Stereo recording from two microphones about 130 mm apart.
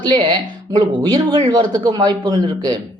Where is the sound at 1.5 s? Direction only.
30° right (ahead or behind).